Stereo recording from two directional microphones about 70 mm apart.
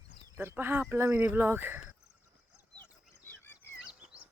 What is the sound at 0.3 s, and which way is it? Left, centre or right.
Speech, right.